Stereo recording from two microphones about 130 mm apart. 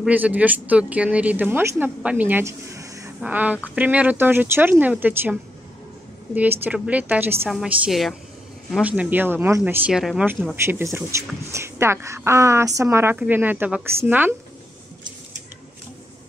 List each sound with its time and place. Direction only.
0.0 s speech: 10° right (ahead or behind)
3.2 s a woman's voice: 10° right (ahead or behind)
9.9 s a woman's voice: 5° right (ahead or behind)
10.5 s speech: 20° right (ahead or behind)